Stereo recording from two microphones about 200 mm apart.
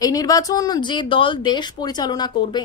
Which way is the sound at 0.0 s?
20° left (ahead or behind).